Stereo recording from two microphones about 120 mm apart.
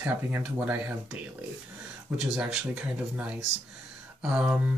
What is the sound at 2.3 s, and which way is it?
Speech, 5° right (ahead or behind).